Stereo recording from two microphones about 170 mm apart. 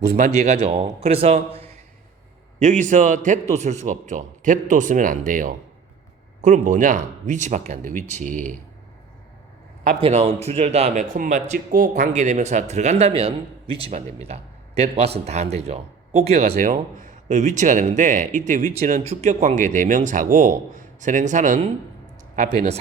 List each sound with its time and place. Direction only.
0.3 s a man's voice: 40° right (ahead or behind)
2.6 s speech: 45° right (ahead or behind)
10.0 s a man's voice: 40° right (ahead or behind)
16.5 s speech: 55° right (ahead or behind)